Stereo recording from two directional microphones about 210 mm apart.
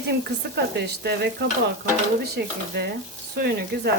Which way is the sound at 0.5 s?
50° right (ahead or behind).